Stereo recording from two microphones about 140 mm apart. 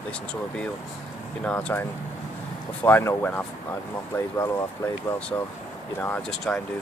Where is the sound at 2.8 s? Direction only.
15° left (ahead or behind).